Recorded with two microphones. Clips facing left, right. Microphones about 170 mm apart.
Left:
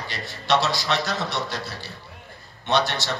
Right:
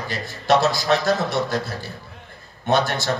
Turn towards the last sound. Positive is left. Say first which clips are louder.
# right 3 dB
turn(degrees=-50)  # may be behind; listen again after turning